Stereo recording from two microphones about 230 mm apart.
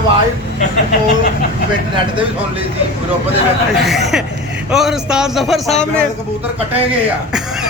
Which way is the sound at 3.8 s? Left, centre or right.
Centre.